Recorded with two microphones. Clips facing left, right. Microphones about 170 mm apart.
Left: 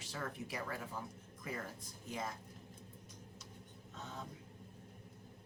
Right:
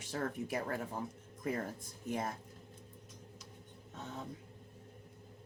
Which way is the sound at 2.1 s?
55° right (ahead or behind).